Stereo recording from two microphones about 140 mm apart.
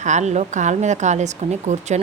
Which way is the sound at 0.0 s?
55° right (ahead or behind).